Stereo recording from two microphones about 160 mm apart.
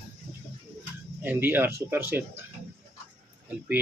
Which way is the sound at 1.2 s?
10° right (ahead or behind).